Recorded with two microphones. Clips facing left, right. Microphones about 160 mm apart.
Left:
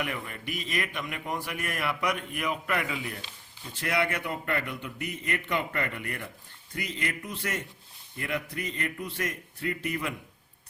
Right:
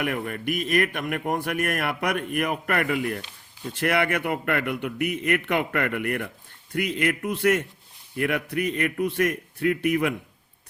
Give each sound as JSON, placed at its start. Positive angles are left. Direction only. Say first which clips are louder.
{"t": 0.0, "sound": "a man's voice", "louder": "right 7 dB", "side_deg": -55}